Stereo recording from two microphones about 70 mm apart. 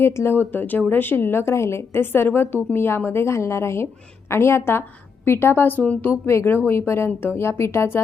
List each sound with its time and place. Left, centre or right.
0.0 s a woman's voice: left